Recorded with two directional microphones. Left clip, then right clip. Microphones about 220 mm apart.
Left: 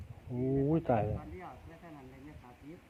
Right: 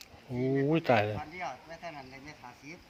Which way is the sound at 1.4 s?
45° right (ahead or behind).